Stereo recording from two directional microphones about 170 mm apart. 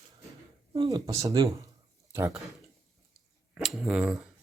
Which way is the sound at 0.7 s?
25° right (ahead or behind).